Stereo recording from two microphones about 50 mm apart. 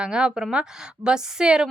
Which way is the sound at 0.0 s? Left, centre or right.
Centre.